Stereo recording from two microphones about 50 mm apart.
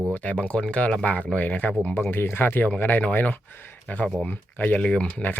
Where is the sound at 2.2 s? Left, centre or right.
Left.